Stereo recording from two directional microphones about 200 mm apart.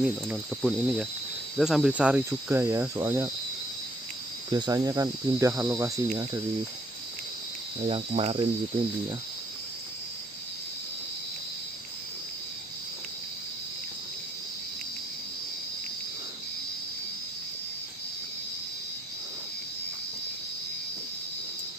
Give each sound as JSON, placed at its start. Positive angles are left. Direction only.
{"t": 0.0, "sound": "speech", "side_deg": -5}
{"t": 4.5, "sound": "speech", "side_deg": -20}
{"t": 7.8, "sound": "speech", "side_deg": -30}